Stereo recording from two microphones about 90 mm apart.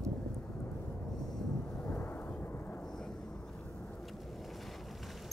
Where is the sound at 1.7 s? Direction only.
15° left (ahead or behind).